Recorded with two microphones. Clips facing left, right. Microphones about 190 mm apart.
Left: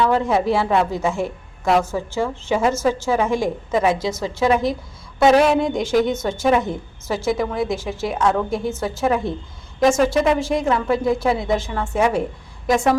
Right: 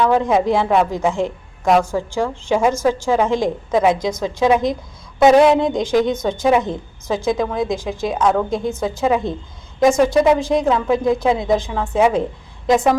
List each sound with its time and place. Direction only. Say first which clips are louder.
0.0 s a woman's voice: right 2 dB; 15° right (ahead or behind)